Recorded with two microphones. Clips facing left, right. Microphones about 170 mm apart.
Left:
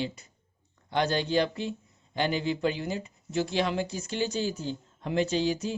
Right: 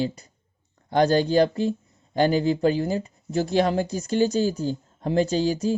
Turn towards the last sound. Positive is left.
turn(degrees=-40)  # may be behind; listen again after turning